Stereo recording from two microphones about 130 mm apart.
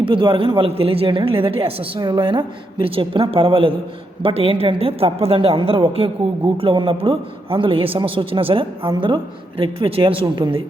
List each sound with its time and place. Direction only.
0.0 s a man's voice: 40° right (ahead or behind)
2.0 s a woman's voice: 35° right (ahead or behind)